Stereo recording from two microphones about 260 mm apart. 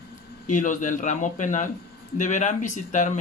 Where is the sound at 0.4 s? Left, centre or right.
Left.